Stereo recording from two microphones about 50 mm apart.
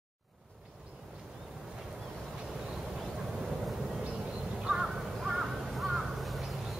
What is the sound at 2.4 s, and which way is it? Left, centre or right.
Vehicle, centre.